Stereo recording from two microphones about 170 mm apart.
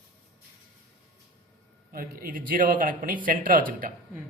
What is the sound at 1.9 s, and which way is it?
A man's voice, 60° right (ahead or behind).